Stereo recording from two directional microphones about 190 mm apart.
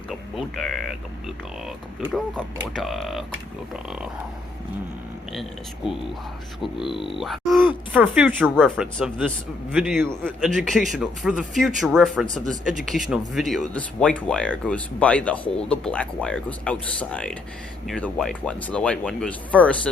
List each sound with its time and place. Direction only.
0.1 s speech: centre (ahead or behind)
2.1 s speech: centre (ahead or behind)
5.3 s speech: centre (ahead or behind)
6.8 s speech: 25° left (ahead or behind)
7.1 s speech: centre (ahead or behind)